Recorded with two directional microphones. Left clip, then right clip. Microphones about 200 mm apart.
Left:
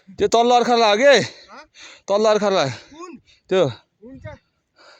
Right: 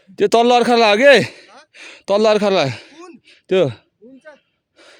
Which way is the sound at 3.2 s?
50° right (ahead or behind).